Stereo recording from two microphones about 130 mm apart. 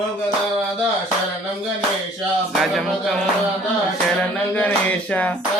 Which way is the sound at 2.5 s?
Centre (ahead or behind).